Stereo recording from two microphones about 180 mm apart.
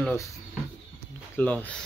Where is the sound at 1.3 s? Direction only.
10° left (ahead or behind).